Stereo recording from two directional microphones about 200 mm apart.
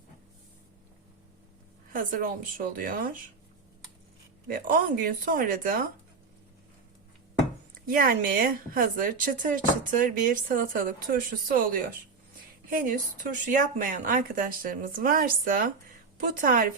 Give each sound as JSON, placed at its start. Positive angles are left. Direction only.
{"t": 1.9, "sound": "speech", "side_deg": -40}
{"t": 4.4, "sound": "speech", "side_deg": -45}
{"t": 7.9, "sound": "speech", "side_deg": -45}